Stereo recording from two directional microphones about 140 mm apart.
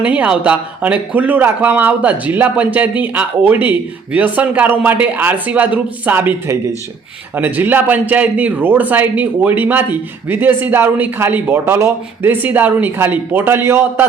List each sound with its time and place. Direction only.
0.0 s a man's voice: 10° right (ahead or behind)